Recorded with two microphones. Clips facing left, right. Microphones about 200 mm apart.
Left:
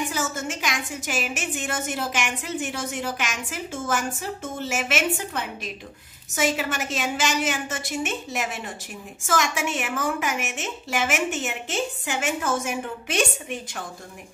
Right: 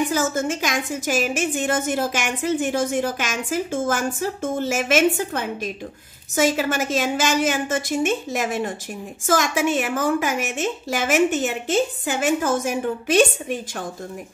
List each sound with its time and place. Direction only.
0.1 s a woman's voice: 40° right (ahead or behind)